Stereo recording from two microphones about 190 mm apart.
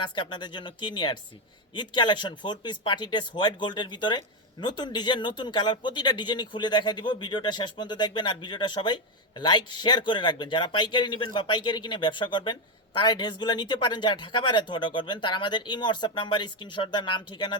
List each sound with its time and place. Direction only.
0.0 s speech: 25° left (ahead or behind)